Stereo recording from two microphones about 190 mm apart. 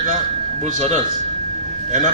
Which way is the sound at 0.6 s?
40° right (ahead or behind).